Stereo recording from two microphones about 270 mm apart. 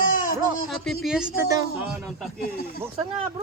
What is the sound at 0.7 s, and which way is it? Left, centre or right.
Speech, centre.